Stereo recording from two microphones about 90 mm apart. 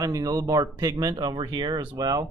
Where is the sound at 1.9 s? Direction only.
45° right (ahead or behind).